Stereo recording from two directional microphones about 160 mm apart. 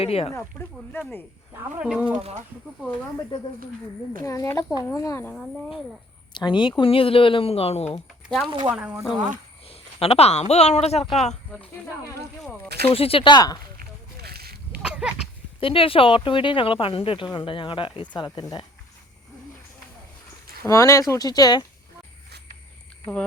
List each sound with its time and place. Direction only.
0.0 s speech: 40° left (ahead or behind)
0.3 s speech: 15° left (ahead or behind)
1.5 s speech: 5° right (ahead or behind)
4.2 s speech: 20° left (ahead or behind)
6.3 s speech: 30° left (ahead or behind)
8.4 s speech: 30° right (ahead or behind)
8.7 s speech: 5° right (ahead or behind)
9.6 s speech: 40° left (ahead or behind)
12.8 s speech: 35° left (ahead or behind)
13.7 s a sound: 80° right
14.8 s a sound: 5° right (ahead or behind)
15.6 s speech: 35° left (ahead or behind)
20.7 s speech: 20° left (ahead or behind)